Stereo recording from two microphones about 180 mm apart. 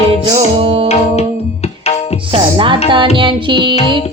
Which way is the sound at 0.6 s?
30° right (ahead or behind).